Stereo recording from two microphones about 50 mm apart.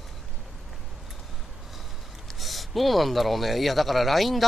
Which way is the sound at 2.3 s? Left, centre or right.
Centre.